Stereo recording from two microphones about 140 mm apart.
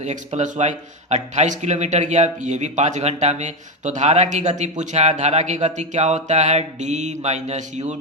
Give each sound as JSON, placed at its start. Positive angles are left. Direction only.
{"t": 0.3, "sound": "speech", "side_deg": -60}